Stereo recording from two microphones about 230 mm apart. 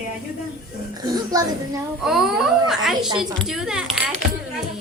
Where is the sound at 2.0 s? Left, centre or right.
Centre.